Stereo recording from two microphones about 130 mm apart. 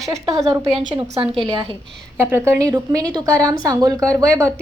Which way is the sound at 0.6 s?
45° right (ahead or behind).